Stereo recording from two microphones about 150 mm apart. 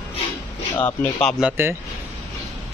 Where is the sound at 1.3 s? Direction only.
10° right (ahead or behind).